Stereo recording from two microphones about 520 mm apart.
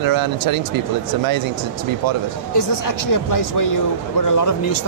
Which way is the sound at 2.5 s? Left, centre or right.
Left.